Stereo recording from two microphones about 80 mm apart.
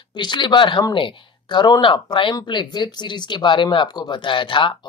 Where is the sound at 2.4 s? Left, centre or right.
Left.